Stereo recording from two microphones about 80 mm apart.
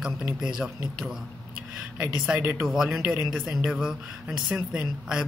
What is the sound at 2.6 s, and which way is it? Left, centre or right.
A man's voice, centre.